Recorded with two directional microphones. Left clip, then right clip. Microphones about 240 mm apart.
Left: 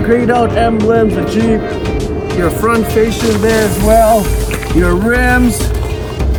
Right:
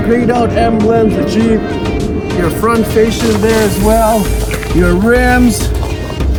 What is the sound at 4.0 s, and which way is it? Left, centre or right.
Speech, centre.